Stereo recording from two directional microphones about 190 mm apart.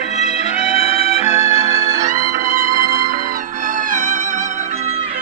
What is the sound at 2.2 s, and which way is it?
Music, 40° right (ahead or behind).